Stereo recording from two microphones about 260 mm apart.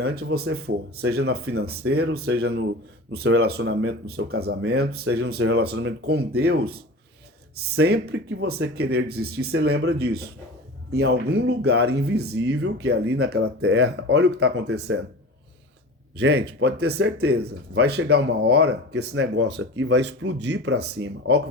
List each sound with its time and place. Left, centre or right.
0.0 s speech: right
16.1 s speech: right